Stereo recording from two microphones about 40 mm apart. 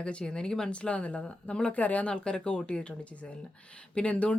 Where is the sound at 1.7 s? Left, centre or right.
Left.